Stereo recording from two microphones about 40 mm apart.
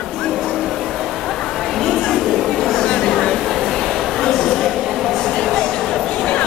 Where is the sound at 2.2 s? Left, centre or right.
Centre.